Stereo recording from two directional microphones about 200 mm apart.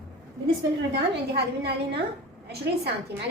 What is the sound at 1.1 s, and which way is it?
Speech, 55° right (ahead or behind).